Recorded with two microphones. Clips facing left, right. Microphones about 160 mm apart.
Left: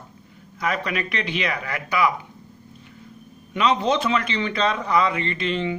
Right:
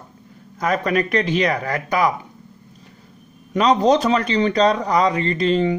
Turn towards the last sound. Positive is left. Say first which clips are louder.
# right 7 dB
turn(degrees=-40)  # may be behind; listen again after turning